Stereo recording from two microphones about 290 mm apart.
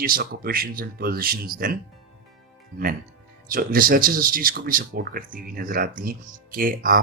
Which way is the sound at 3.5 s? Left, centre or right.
Right.